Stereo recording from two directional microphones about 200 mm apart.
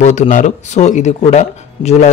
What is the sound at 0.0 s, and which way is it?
Speech, 35° left (ahead or behind).